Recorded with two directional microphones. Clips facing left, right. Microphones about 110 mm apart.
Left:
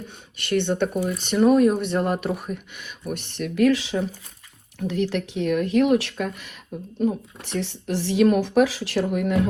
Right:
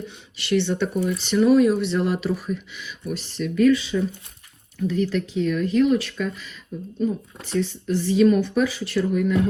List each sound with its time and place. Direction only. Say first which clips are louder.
0.3 s a woman's voice: even; 50° left (ahead or behind)